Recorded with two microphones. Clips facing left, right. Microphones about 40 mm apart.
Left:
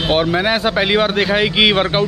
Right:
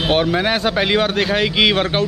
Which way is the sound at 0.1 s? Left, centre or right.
Centre.